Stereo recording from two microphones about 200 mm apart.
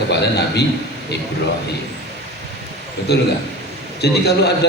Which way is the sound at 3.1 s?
55° left (ahead or behind).